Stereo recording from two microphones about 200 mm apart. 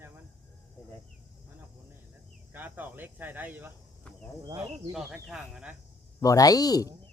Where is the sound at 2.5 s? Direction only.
10° right (ahead or behind).